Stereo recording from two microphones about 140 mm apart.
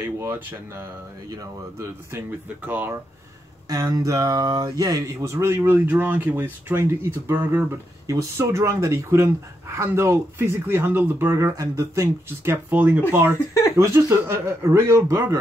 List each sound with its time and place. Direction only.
0.2 s speech: 20° right (ahead or behind)
3.6 s speech: 25° right (ahead or behind)